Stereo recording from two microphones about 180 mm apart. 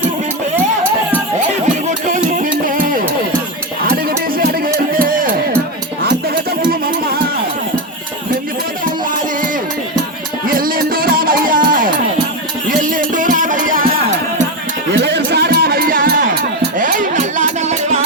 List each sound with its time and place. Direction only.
1.9 s music: 45° right (ahead or behind)
4.4 s music: 55° right (ahead or behind)
6.0 s music: 65° right (ahead or behind)
10.4 s music: 50° right (ahead or behind)
14.9 s music: 70° right (ahead or behind); by 17.7 s 40° right (ahead or behind)